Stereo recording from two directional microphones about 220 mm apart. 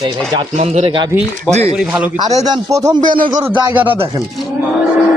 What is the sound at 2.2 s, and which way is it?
Speech, 15° right (ahead or behind).